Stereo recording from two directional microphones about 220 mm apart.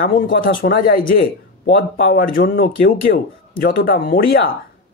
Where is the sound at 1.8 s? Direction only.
45° left (ahead or behind).